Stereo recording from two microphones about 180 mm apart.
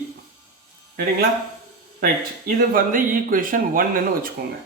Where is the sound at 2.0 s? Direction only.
50° right (ahead or behind).